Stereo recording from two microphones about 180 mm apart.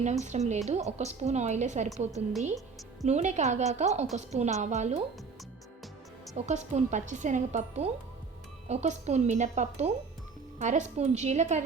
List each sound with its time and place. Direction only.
0.0 s speech: 40° right (ahead or behind)
3.1 s speech: 40° right (ahead or behind)
6.3 s speech: 40° right (ahead or behind)